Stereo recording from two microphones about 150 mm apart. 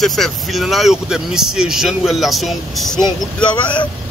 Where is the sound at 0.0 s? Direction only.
Centre (ahead or behind).